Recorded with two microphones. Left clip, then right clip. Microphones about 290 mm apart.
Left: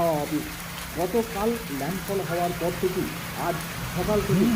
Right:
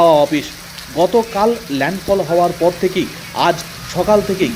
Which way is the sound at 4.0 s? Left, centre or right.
Right.